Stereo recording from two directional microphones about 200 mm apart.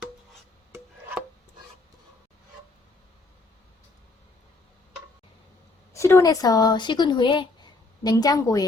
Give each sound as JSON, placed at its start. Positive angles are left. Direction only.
{"t": 5.9, "sound": "speech", "side_deg": 15}